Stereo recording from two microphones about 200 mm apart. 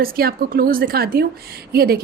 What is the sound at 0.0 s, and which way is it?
A woman's voice, 45° right (ahead or behind).